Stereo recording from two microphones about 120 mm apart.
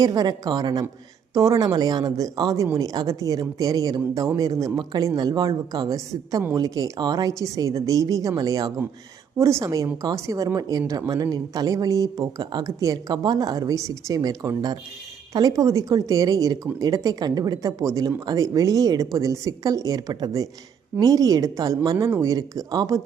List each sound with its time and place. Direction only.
0.0 s a woman's voice: 30° right (ahead or behind)